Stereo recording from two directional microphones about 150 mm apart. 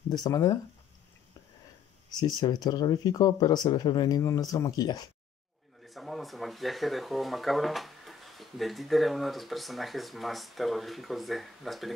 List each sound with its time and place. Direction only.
0.1 s speech: 25° left (ahead or behind)
2.0 s speech: 25° left (ahead or behind)
5.8 s speech: centre (ahead or behind)